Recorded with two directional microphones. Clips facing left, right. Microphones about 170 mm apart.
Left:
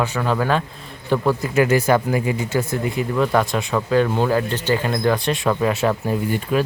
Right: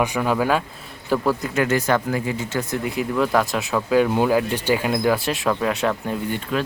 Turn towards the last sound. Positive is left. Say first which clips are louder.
# left 4 dB
turn(degrees=5)  # may be behind; listen again after turning